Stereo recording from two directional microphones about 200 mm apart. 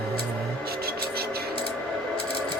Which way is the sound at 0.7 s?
50° right (ahead or behind).